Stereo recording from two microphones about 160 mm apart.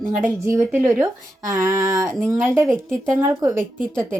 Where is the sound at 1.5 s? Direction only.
20° right (ahead or behind).